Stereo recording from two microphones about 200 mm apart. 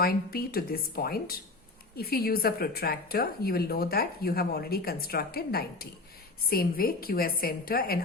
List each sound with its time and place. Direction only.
0.0 s a woman's voice: 50° left (ahead or behind)